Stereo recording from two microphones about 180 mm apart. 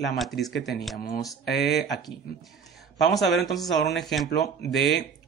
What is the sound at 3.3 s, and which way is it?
Speech, centre (ahead or behind).